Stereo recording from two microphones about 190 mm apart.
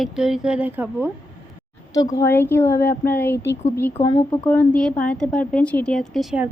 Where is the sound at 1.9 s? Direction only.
15° left (ahead or behind).